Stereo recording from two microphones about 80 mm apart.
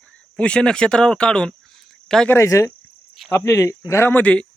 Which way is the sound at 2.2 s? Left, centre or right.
Left.